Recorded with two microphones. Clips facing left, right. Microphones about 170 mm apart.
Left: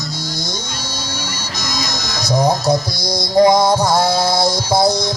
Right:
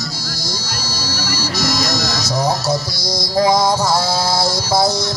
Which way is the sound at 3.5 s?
15° left (ahead or behind).